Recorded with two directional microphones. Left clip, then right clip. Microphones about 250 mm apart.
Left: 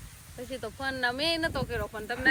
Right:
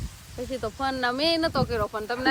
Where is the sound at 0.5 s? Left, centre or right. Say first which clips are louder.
Right 5 dB; right.